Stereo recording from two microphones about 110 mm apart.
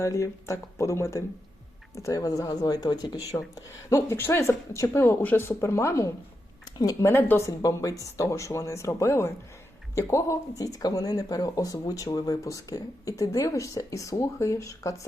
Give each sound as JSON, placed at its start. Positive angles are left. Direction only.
{"t": 0.0, "sound": "speech", "side_deg": 25}